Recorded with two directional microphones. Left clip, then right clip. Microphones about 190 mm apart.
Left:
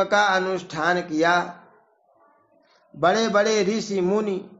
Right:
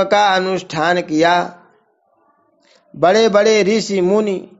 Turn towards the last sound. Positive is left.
turn(degrees=-40)  # may be behind; listen again after turning